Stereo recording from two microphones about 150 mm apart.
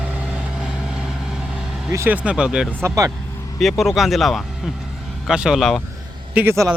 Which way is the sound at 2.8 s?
20° right (ahead or behind).